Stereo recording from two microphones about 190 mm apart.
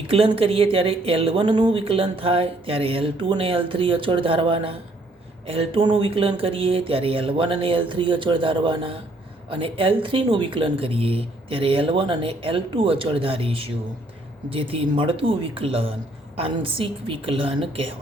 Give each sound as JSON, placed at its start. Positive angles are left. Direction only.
{"t": 0.1, "sound": "speech", "side_deg": -30}